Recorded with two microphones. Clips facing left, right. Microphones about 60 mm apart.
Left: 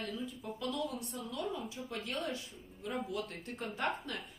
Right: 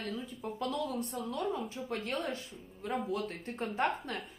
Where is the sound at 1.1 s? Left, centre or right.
Right.